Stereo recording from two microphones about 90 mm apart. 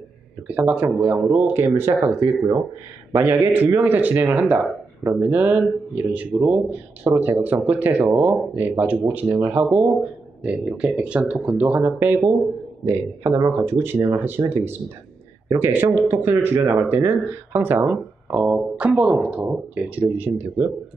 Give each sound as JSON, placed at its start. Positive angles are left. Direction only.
{"t": 0.5, "sound": "speech", "side_deg": -15}
{"t": 12.8, "sound": "speech", "side_deg": -35}
{"t": 13.5, "sound": "speech", "side_deg": -25}